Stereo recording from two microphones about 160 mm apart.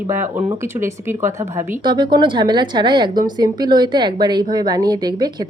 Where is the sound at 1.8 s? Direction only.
30° right (ahead or behind).